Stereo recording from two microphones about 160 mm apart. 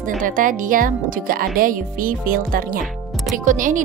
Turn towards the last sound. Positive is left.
turn(degrees=-55)  # may be behind; listen again after turning